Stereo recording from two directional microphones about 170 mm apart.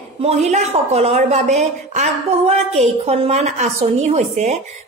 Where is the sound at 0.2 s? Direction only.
40° right (ahead or behind).